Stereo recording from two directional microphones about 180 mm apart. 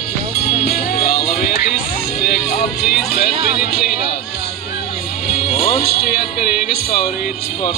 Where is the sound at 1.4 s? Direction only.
55° left (ahead or behind).